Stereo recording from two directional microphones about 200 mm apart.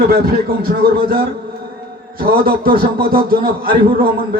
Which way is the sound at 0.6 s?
50° right (ahead or behind).